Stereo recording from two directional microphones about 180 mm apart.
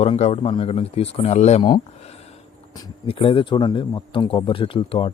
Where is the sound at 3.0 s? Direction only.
30° left (ahead or behind).